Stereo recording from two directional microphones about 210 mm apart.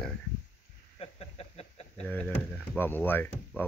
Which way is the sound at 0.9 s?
30° left (ahead or behind).